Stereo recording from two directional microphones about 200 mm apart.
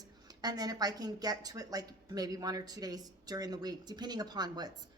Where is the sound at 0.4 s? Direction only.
20° right (ahead or behind).